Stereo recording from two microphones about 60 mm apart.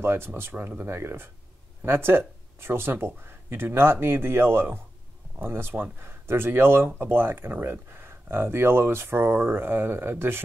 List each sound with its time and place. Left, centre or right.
0.0 s speech: right